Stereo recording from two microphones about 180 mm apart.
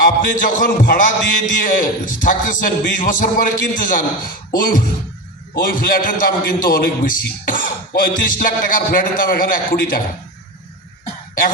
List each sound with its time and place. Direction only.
0.0 s a man's voice: 50° left (ahead or behind)